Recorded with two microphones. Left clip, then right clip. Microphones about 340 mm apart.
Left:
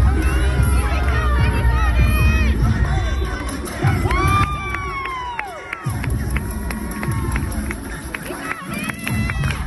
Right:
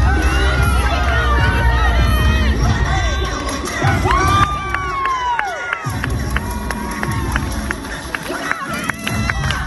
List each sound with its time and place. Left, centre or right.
4.1 s crowd: right